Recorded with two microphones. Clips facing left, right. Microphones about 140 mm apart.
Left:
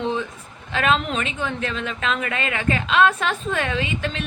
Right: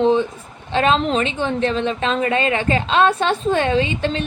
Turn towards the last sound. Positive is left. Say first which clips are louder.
# right 7 dB
turn(degrees=-30)  # may be behind; listen again after turning